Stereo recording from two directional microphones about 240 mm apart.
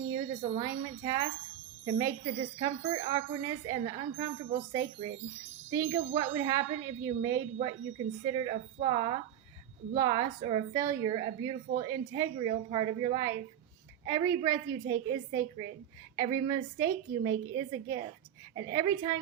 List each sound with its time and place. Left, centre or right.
0.1 s a woman's voice: centre